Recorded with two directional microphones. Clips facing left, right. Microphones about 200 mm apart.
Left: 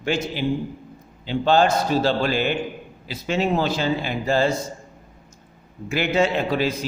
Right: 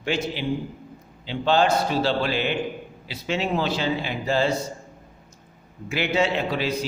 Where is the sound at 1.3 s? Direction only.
45° left (ahead or behind).